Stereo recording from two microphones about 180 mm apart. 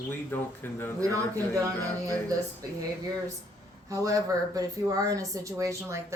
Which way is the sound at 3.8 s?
20° right (ahead or behind).